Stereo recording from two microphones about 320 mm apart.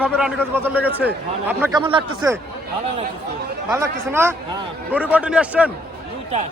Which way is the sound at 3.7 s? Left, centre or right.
Centre.